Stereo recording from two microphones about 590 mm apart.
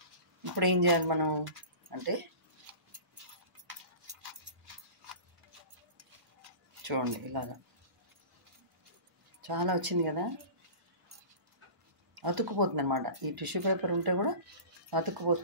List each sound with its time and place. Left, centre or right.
0.6 s speech: right
6.9 s speech: right
9.4 s speech: right
12.2 s speech: right